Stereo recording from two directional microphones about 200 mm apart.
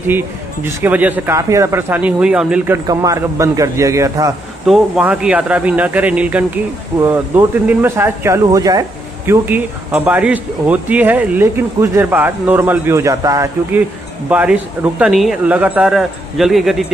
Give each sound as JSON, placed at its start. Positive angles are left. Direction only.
{"t": 0.7, "sound": "speech", "side_deg": -10}
{"t": 2.9, "sound": "speech", "side_deg": -15}
{"t": 4.6, "sound": "speech", "side_deg": -5}